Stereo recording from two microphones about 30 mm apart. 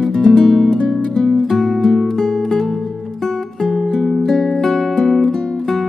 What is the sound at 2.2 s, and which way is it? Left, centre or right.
Music, centre.